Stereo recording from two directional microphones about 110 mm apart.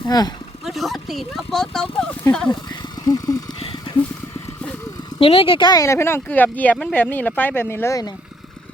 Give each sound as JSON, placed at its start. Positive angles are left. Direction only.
{"t": 0.1, "sound": "speech", "side_deg": 35}
{"t": 0.6, "sound": "speech", "side_deg": 0}
{"t": 2.5, "sound": "a sound", "side_deg": 40}
{"t": 3.6, "sound": "a sound", "side_deg": 50}
{"t": 5.2, "sound": "speech", "side_deg": 60}
{"t": 5.7, "sound": "speech", "side_deg": 25}